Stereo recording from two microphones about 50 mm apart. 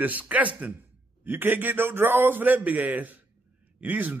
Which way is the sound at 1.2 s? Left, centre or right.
Right.